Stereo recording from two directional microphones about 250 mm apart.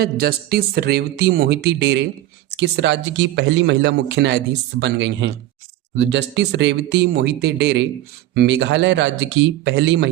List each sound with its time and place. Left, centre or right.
0.0 s a man's voice: right